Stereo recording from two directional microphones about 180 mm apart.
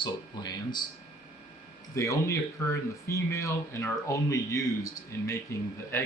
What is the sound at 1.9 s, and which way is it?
Speech, 15° left (ahead or behind).